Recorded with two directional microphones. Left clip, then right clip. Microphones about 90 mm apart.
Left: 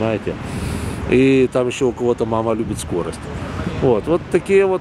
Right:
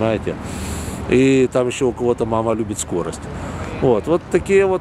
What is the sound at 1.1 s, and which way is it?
Speech, 10° right (ahead or behind).